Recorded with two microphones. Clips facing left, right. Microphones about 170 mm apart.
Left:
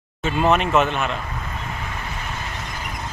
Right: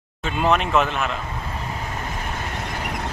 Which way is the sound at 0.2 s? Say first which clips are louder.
Left 2 dB; centre (ahead or behind).